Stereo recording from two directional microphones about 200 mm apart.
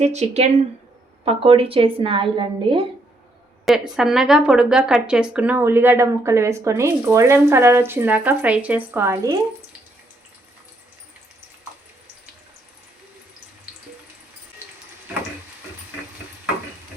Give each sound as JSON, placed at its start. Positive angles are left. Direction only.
{"t": 0.0, "sound": "a woman's voice", "side_deg": -35}
{"t": 3.9, "sound": "speech", "side_deg": 0}